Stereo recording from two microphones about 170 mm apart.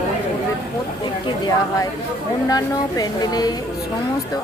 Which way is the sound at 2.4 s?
20° left (ahead or behind).